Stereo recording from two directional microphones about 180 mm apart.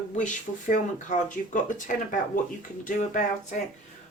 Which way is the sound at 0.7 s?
45° left (ahead or behind).